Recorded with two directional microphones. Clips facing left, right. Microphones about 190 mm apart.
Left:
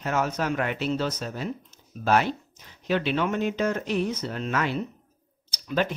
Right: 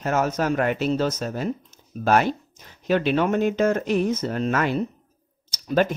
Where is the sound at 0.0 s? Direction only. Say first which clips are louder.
Right 4 dB; 45° right (ahead or behind).